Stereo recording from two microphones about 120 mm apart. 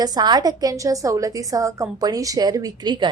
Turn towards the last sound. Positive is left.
turn(degrees=-35)  # may be behind; listen again after turning